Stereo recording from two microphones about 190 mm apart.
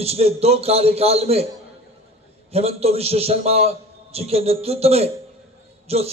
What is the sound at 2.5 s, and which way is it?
A man's voice, 30° right (ahead or behind).